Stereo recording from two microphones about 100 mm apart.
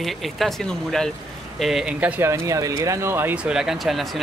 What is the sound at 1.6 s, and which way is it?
Speech, 5° right (ahead or behind).